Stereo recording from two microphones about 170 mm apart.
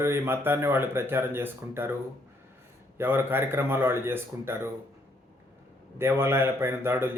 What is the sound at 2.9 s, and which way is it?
A man's voice, 15° right (ahead or behind).